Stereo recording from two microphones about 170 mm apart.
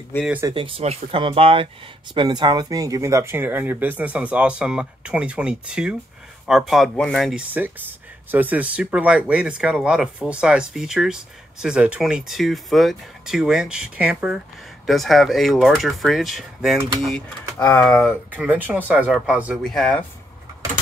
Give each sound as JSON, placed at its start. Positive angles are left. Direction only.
{"t": 0.4, "sound": "speech", "side_deg": -25}
{"t": 8.3, "sound": "speech", "side_deg": -10}
{"t": 18.3, "sound": "speech", "side_deg": -10}